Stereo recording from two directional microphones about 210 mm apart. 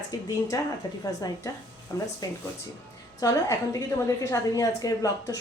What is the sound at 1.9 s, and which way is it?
Speech, 15° left (ahead or behind).